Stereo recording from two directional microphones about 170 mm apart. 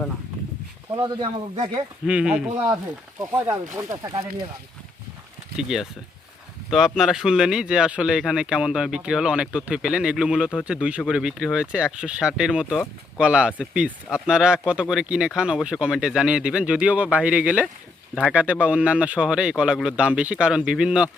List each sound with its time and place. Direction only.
0.9 s speech: 25° right (ahead or behind)
2.0 s speech: 5° right (ahead or behind)
3.2 s speech: 15° right (ahead or behind)
5.5 s speech: 5° right (ahead or behind)